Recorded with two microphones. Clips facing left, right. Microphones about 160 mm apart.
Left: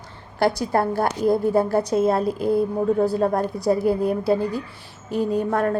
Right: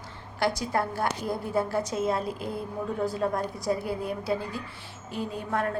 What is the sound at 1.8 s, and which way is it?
A woman's voice, 35° left (ahead or behind).